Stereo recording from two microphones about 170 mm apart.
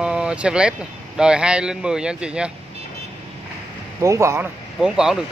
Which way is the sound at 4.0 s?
15° right (ahead or behind).